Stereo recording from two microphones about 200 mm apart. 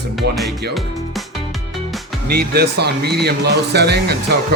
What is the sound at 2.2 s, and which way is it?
Speech, 50° right (ahead or behind).